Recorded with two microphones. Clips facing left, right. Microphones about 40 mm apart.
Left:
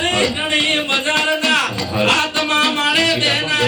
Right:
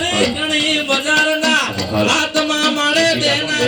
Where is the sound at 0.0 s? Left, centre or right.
Left.